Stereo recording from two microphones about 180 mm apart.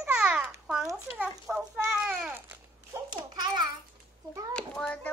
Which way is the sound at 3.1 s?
25° right (ahead or behind).